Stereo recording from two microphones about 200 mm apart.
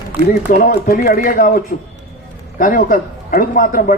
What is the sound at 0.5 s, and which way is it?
Speech, 40° left (ahead or behind).